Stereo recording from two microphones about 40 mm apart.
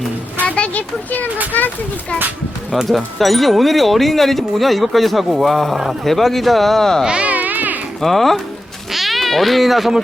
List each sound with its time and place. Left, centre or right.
0.4 s a child's voice: left
2.9 s speech: centre
5.7 s speech: centre
6.1 s speech: centre
7.0 s speech: right
7.3 s music: right
8.0 s speech: centre